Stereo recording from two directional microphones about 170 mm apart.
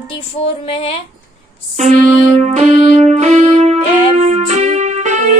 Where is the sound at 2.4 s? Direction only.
40° right (ahead or behind).